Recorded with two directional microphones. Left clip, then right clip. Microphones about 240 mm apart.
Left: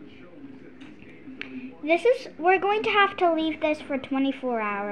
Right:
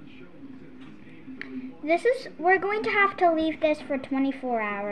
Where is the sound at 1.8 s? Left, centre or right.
Centre.